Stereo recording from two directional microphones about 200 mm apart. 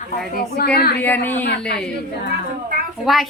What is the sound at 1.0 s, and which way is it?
Speech, 10° left (ahead or behind).